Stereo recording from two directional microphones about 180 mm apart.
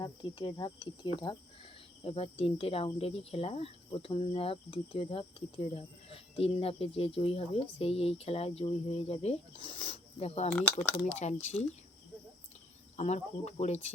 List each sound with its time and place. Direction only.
0.0 s speech: 25° left (ahead or behind)
10.5 s speech: 10° left (ahead or behind)
11.0 s speech: 40° left (ahead or behind)
13.0 s speech: 40° left (ahead or behind)